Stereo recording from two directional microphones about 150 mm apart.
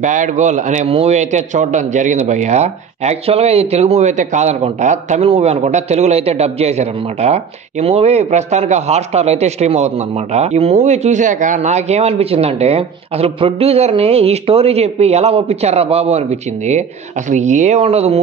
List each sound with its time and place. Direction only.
0.0 s a man's voice: 55° right (ahead or behind)